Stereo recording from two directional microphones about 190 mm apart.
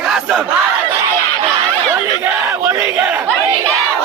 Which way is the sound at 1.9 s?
15° right (ahead or behind).